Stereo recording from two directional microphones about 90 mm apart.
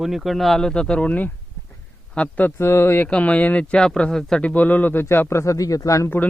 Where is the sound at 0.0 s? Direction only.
Centre (ahead or behind); by 3.1 s 25° left (ahead or behind).